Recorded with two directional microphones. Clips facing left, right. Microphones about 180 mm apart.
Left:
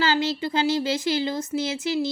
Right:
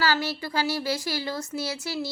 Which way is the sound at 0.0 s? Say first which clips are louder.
Left 3 dB; 20° left (ahead or behind).